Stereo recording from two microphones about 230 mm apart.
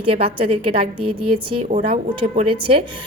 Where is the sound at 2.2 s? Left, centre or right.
Right.